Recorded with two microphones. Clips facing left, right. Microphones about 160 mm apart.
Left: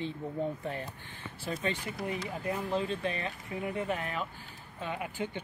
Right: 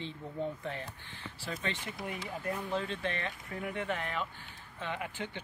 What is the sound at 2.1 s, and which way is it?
Speech, 20° left (ahead or behind).